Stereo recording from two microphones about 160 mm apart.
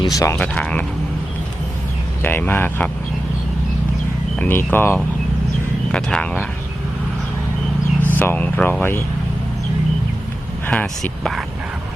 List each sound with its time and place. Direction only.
0.0 s speech: 20° left (ahead or behind)
0.3 s speech: 5° left (ahead or behind)
2.2 s speech: 10° left (ahead or behind)
4.4 s speech: 15° left (ahead or behind)
8.1 s speech: 10° left (ahead or behind)
10.7 s speech: 5° left (ahead or behind)